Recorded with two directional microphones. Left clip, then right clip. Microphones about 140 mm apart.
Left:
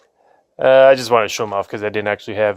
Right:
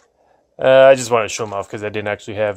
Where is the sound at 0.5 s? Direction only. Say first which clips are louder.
Even; 30° left (ahead or behind).